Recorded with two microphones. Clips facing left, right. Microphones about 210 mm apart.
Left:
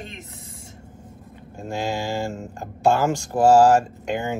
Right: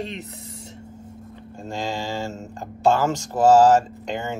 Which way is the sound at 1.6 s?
10° left (ahead or behind).